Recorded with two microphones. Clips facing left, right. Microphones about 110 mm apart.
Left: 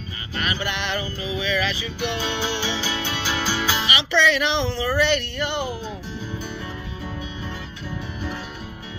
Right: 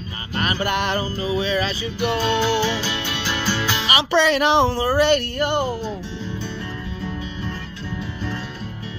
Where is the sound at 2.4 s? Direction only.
10° left (ahead or behind).